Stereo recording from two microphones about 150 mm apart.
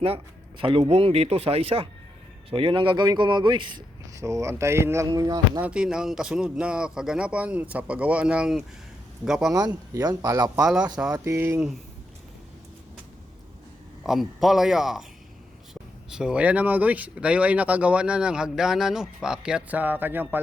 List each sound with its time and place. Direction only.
0.6 s a man's voice: 35° right (ahead or behind)
4.1 s a man's voice: 20° right (ahead or behind)
5.6 s a man's voice: 5° right (ahead or behind)
9.5 s a man's voice: 25° right (ahead or behind)
14.0 s a man's voice: centre (ahead or behind)